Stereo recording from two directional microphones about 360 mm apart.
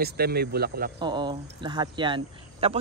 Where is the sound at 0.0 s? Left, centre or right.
Right.